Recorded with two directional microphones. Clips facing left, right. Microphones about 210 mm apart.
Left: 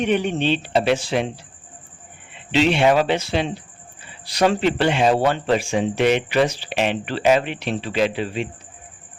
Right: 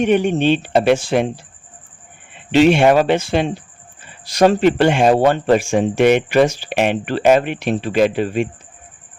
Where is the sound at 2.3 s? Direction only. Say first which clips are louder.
Right 6 dB; 50° right (ahead or behind).